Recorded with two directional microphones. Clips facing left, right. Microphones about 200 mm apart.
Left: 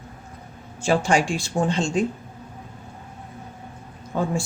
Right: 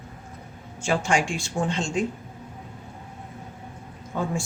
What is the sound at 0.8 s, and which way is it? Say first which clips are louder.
Speech: left 4 dB; 35° left (ahead or behind).